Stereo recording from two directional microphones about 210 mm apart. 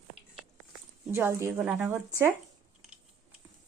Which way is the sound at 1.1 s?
10° right (ahead or behind).